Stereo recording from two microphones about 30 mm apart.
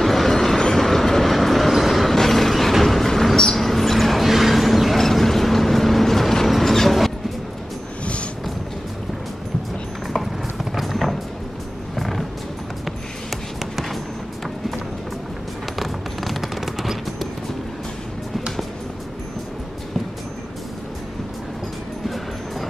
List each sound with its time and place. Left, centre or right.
0.0 s vehicle: centre
0.7 s train: centre
2.8 s a sound: centre
4.9 s vehicle: centre
8.0 s a sound: left
10.1 s music: centre
12.8 s music: centre
15.8 s machine gun: centre
22.0 s music: centre